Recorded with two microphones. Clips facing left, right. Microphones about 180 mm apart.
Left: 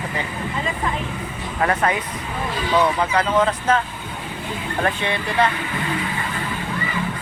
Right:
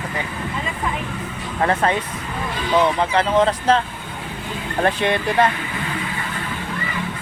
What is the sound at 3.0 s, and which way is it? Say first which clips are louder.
Speech: right 2 dB; 30° right (ahead or behind).